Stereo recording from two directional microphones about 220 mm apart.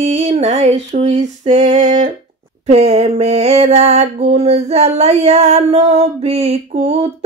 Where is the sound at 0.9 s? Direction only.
30° right (ahead or behind).